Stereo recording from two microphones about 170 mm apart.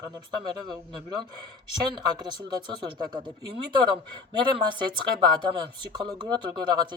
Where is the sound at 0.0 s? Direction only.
25° right (ahead or behind).